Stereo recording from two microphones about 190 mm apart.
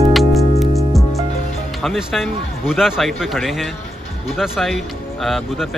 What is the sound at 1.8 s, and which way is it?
Speech, centre (ahead or behind).